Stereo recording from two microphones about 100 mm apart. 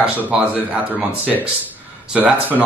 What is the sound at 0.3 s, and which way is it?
Speech, 10° right (ahead or behind).